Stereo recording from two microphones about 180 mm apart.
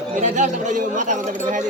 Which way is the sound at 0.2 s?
45° right (ahead or behind).